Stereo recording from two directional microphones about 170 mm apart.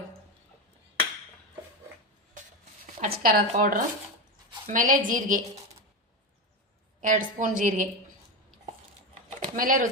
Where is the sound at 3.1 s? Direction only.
60° right (ahead or behind).